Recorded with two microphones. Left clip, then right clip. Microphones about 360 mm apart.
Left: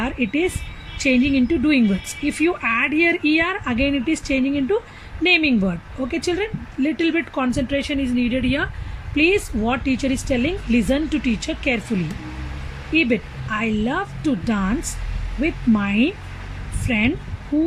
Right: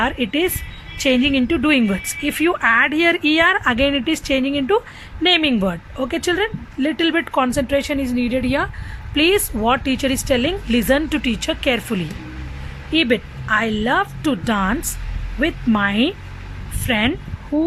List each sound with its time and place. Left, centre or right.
0.0 s a woman's voice: right
12.9 s speech: centre
15.4 s speech: right
15.8 s speech: right